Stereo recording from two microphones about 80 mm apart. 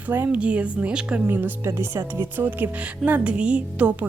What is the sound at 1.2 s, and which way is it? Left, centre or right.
A woman's voice, right.